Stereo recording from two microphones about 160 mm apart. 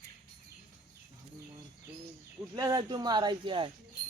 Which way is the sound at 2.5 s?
25° right (ahead or behind).